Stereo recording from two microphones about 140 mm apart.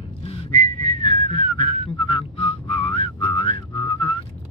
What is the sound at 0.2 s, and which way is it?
Whistling, 45° left (ahead or behind).